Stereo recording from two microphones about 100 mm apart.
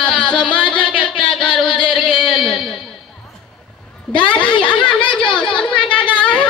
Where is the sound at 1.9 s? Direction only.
Centre (ahead or behind).